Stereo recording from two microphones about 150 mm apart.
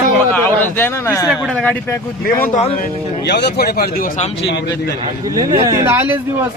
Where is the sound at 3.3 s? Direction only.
90° left.